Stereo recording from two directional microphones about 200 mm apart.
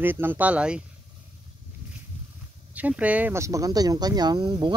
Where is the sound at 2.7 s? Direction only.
5° right (ahead or behind).